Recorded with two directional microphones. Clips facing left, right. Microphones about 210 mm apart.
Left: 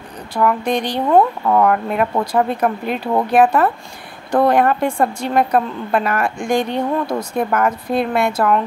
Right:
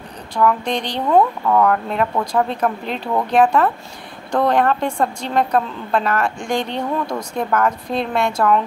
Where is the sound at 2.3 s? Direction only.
10° left (ahead or behind).